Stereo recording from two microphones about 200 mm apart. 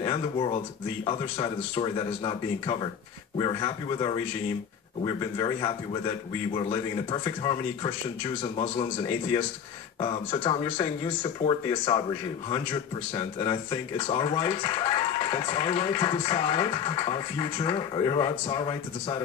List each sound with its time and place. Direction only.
0.0 s speech: 25° left (ahead or behind)
13.1 s speech: 25° left (ahead or behind)